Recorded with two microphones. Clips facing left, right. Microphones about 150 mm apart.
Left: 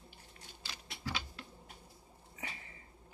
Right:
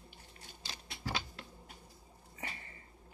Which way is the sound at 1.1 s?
30° right (ahead or behind).